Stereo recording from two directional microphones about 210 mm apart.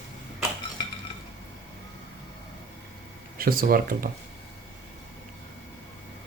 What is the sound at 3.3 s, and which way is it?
Speech, 45° right (ahead or behind).